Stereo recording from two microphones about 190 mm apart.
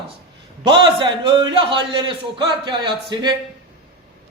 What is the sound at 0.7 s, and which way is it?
A man's voice, 25° right (ahead or behind).